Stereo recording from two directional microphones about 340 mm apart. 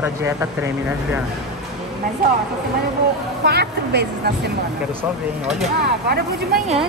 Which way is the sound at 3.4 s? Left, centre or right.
Right.